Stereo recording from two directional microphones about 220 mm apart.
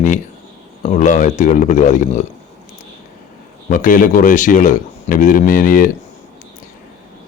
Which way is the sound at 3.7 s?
35° left (ahead or behind).